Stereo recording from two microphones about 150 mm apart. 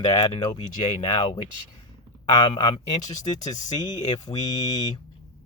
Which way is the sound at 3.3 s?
25° left (ahead or behind).